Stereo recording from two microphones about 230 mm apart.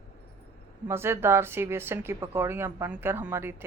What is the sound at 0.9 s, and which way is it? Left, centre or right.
A woman's voice, centre.